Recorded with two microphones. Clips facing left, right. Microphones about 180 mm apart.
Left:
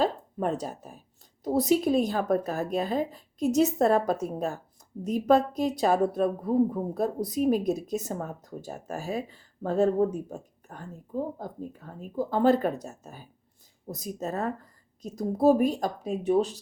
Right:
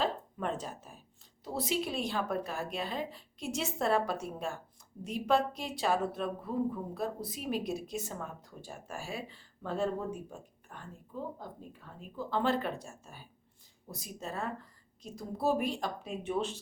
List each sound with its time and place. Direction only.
0.0 s a woman's voice: 40° left (ahead or behind)